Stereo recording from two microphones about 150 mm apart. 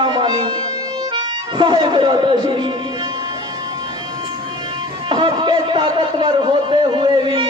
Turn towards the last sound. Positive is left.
turn(degrees=-30)  # may be behind; listen again after turning